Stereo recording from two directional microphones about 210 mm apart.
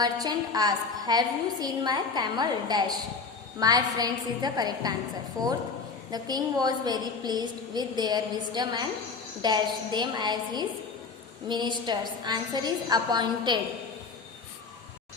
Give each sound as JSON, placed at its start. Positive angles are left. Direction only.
{"t": 0.0, "sound": "a woman's voice", "side_deg": -20}